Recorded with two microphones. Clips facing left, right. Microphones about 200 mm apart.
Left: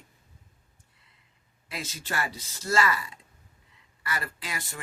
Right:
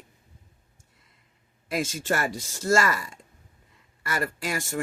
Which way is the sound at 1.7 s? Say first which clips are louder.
Right 9 dB; 50° right (ahead or behind).